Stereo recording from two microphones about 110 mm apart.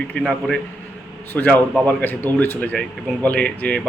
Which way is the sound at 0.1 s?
10° left (ahead or behind).